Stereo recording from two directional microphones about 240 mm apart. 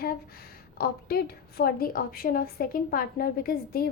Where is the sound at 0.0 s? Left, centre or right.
Left.